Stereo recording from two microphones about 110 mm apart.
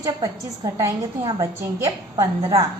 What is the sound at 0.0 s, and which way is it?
A woman's voice, 30° right (ahead or behind).